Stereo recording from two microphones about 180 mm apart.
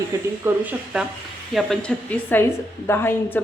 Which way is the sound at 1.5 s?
5° left (ahead or behind).